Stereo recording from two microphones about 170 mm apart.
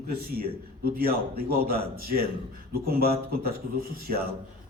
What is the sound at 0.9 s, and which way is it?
A man's voice, 60° right (ahead or behind).